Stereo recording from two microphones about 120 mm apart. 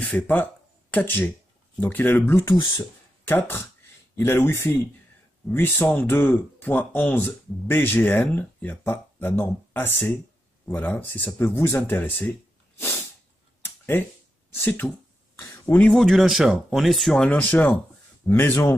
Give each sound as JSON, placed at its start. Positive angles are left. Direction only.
{"t": 0.0, "sound": "speech", "side_deg": 15}
{"t": 2.4, "sound": "speech", "side_deg": 40}
{"t": 2.7, "sound": "speech", "side_deg": 20}
{"t": 14.6, "sound": "a sound", "side_deg": 15}
{"t": 15.9, "sound": "speech", "side_deg": 0}